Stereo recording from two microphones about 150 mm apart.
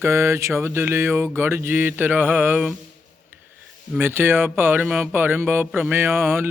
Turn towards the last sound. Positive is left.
turn(degrees=-15)  # may be behind; listen again after turning